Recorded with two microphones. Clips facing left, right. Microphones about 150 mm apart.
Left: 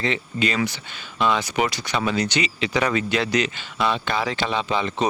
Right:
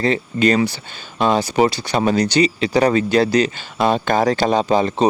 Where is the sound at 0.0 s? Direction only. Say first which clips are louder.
Right 7 dB; 40° right (ahead or behind).